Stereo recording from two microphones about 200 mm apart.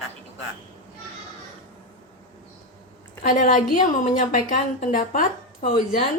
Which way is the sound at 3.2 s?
40° left (ahead or behind).